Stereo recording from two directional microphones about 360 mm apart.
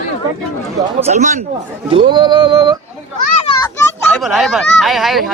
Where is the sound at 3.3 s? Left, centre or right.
Centre.